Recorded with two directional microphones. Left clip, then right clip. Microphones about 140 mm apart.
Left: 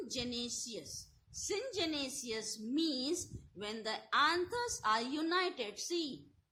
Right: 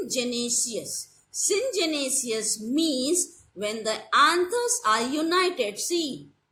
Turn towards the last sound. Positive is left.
turn(degrees=50)  # may be behind; listen again after turning